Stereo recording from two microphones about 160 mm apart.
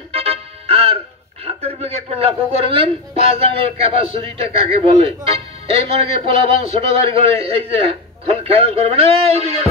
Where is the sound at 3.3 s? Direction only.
35° right (ahead or behind).